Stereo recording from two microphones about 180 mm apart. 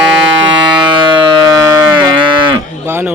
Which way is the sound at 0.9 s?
25° right (ahead or behind).